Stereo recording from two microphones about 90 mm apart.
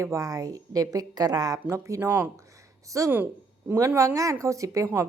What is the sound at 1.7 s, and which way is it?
Speech, 30° right (ahead or behind).